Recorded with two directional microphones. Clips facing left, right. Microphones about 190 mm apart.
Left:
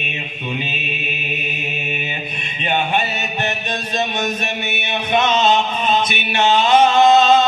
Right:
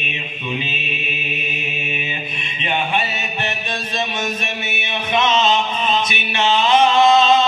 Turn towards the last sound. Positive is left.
turn(degrees=45)  # may be behind; listen again after turning